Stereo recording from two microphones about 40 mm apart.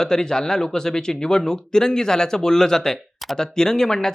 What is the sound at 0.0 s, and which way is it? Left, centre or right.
A man's voice, centre.